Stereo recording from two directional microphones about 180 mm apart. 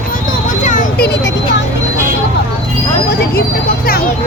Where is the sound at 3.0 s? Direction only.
55° left (ahead or behind).